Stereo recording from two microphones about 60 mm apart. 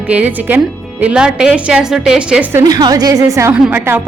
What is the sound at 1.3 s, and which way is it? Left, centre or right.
A woman's voice, centre.